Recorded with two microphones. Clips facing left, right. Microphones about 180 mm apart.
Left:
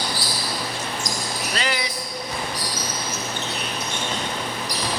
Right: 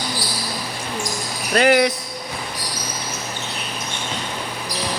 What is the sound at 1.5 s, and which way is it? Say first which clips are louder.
Speech: right 14 dB; 55° right (ahead or behind).